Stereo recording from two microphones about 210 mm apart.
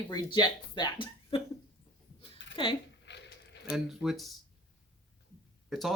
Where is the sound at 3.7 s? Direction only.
Centre (ahead or behind).